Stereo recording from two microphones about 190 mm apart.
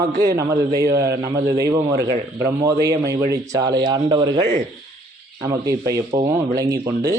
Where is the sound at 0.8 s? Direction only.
15° right (ahead or behind).